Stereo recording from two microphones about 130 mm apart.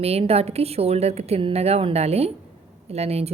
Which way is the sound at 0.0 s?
50° right (ahead or behind).